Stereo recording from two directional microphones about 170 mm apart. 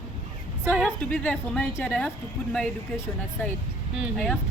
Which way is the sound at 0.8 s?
5° left (ahead or behind).